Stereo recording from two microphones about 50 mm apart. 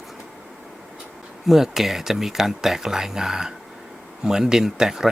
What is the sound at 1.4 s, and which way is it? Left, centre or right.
Speech, centre.